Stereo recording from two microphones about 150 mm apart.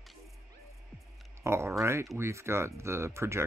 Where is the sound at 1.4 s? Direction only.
15° right (ahead or behind).